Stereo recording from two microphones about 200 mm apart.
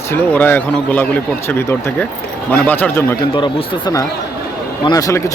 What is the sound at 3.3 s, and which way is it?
Speech, 20° left (ahead or behind).